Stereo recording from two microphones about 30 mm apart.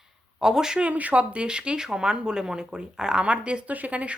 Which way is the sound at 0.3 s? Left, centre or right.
Centre.